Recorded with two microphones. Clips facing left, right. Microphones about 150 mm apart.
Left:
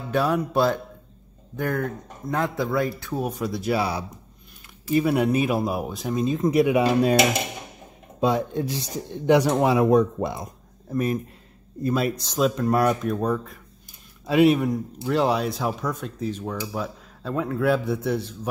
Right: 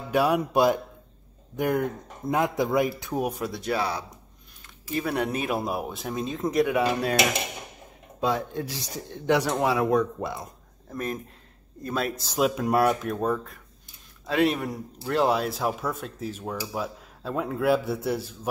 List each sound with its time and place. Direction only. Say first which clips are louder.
0.1 s a man's voice: even; 10° right (ahead or behind)
3.3 s speech: left 3 dB; centre (ahead or behind); by 7.2 s 20° left (ahead or behind)
8.2 s speech: left 4 dB; 20° left (ahead or behind)
10.9 s speech: left 7 dB; 5° left (ahead or behind)
12.2 s a man's voice: left 2 dB; 5° right (ahead or behind)